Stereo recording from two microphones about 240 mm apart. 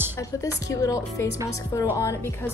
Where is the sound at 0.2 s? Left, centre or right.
Centre.